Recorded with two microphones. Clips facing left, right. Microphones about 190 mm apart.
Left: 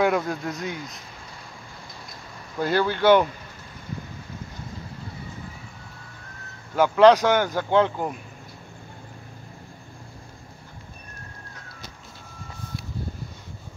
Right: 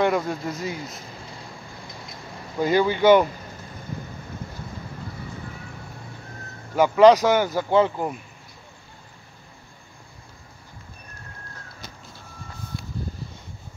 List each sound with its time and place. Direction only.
0.0 s speech: centre (ahead or behind)
2.6 s speech: 10° right (ahead or behind)
6.7 s speech: 10° right (ahead or behind)